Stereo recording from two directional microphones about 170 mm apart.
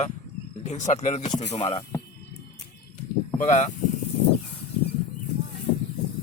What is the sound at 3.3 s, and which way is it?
Speech, 45° left (ahead or behind).